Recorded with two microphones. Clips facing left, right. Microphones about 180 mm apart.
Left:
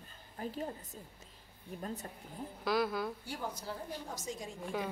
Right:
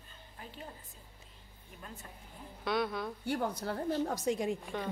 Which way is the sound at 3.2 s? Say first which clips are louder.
Right 7 dB; 60° right (ahead or behind).